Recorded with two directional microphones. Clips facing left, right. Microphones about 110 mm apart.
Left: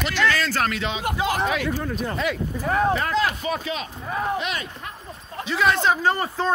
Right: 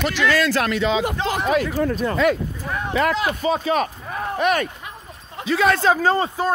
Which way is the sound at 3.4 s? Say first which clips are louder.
Right 6 dB; 35° right (ahead or behind).